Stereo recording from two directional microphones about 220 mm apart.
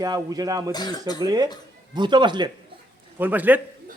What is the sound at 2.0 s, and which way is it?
Speech, 20° right (ahead or behind).